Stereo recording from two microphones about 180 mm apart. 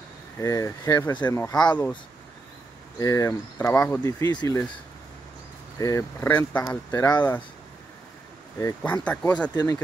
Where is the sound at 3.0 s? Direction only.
20° left (ahead or behind).